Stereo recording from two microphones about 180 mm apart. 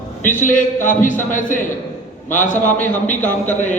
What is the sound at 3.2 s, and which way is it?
Speech, 10° left (ahead or behind).